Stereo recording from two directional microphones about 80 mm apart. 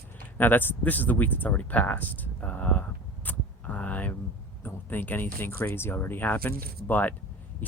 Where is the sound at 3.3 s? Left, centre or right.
Centre.